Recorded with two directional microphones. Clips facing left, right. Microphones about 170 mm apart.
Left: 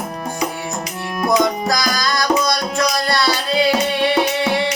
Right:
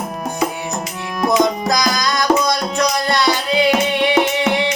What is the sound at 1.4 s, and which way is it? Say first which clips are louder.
Music: right 2 dB; 20° right (ahead or behind).